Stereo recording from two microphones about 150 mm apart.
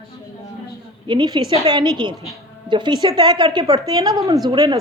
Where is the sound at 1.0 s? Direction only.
30° right (ahead or behind).